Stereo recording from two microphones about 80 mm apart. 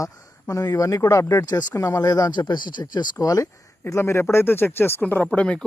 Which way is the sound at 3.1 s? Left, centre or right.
Left.